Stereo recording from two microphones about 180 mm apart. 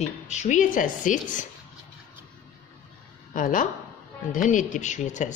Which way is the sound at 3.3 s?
45° left (ahead or behind).